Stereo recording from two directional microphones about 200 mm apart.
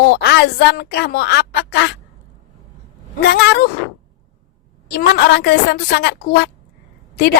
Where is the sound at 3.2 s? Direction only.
55° left (ahead or behind).